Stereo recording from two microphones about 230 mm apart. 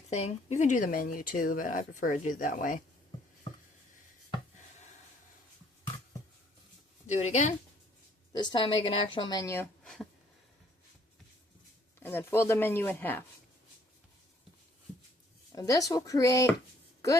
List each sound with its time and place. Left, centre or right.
0.1 s speech: left
7.1 s speech: left
8.3 s a woman's voice: centre
9.8 s speech: centre
11.9 s speech: centre
15.5 s speech: centre